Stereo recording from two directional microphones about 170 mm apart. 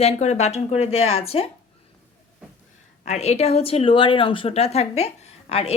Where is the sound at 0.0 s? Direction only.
40° left (ahead or behind).